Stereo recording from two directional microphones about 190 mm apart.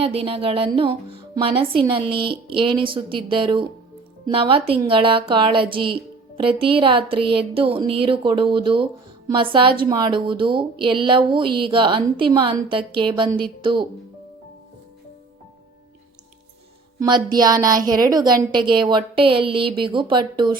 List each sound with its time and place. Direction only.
0.0 s speech: 30° right (ahead or behind)
17.0 s speech: 20° right (ahead or behind)